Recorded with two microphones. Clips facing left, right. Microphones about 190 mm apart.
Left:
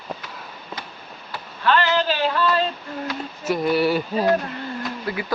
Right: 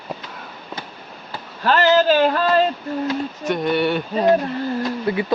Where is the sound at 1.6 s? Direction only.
40° right (ahead or behind).